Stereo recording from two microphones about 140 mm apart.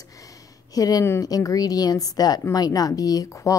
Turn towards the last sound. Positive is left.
turn(degrees=25)  # may be behind; listen again after turning